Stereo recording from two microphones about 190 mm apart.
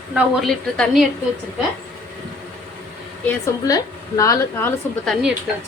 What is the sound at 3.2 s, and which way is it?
A woman's voice, 20° left (ahead or behind).